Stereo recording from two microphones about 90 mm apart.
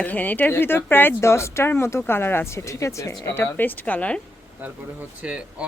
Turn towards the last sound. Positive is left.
turn(degrees=-10)  # may be behind; listen again after turning